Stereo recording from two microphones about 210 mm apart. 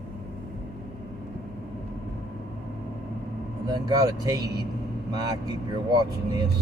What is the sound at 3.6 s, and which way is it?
Speech, 15° right (ahead or behind).